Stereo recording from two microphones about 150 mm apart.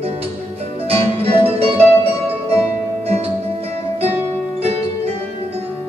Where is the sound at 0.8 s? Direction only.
40° right (ahead or behind).